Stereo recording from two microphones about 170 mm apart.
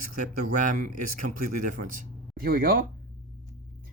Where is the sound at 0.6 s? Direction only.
50° right (ahead or behind).